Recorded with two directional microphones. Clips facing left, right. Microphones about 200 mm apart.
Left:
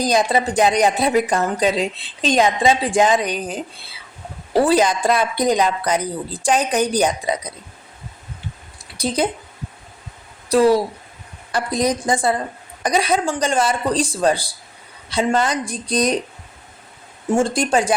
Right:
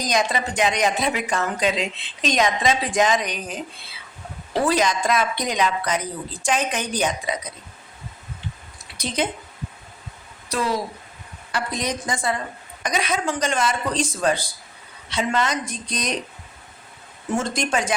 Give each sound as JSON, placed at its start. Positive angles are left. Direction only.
{"t": 0.0, "sound": "speech", "side_deg": 35}
{"t": 4.6, "sound": "speech", "side_deg": 30}
{"t": 9.0, "sound": "speech", "side_deg": 35}
{"t": 10.5, "sound": "speech", "side_deg": 35}
{"t": 17.3, "sound": "speech", "side_deg": 30}